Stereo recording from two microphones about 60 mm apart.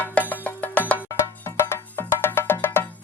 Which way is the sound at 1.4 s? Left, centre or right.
Left.